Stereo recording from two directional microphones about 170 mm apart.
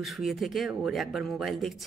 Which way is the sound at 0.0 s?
Centre (ahead or behind).